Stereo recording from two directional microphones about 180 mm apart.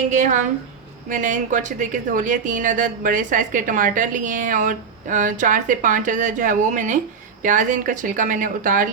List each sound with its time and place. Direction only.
0.1 s speech: 45° right (ahead or behind)